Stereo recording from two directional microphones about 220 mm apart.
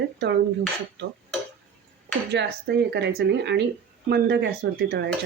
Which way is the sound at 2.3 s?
50° right (ahead or behind).